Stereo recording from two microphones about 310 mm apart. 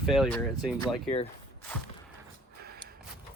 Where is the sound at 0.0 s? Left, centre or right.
Centre.